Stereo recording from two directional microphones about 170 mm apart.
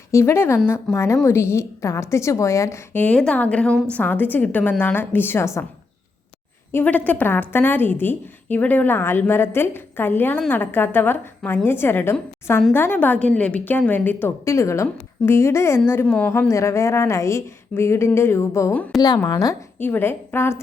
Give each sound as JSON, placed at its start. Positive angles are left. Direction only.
{"t": 0.1, "sound": "a woman's voice", "side_deg": 15}
{"t": 6.7, "sound": "a woman's voice", "side_deg": 10}
{"t": 19.3, "sound": "a woman's voice", "side_deg": 20}